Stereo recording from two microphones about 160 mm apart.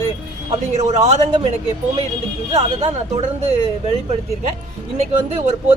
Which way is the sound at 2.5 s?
35° right (ahead or behind).